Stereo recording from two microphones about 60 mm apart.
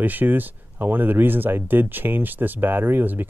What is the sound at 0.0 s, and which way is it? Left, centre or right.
Speech, right.